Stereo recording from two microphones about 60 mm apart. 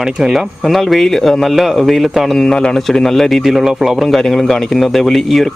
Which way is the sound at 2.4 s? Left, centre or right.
Centre.